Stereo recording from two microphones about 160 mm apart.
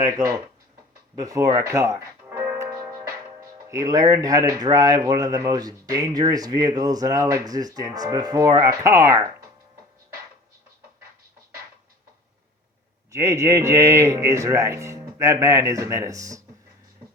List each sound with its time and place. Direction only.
1.1 s music: 20° right (ahead or behind)
3.7 s speech: 20° right (ahead or behind)
13.1 s speech: 20° right (ahead or behind)